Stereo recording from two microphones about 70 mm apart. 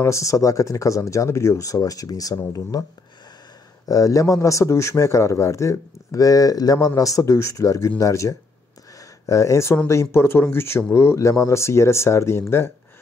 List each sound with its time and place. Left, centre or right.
0.0 s speech: left
3.8 s speech: left
7.0 s speech: left